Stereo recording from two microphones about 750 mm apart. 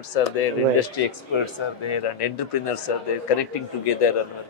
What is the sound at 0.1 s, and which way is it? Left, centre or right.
Speech, left.